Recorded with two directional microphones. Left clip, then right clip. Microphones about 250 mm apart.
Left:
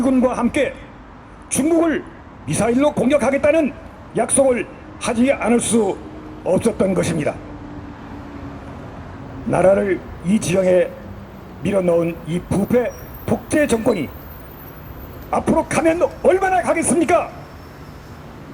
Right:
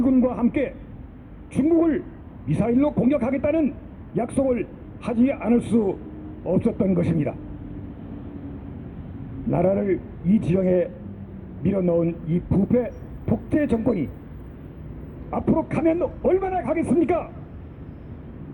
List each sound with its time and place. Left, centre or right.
0.0 s a man's voice: left
9.5 s a man's voice: left
15.3 s a man's voice: left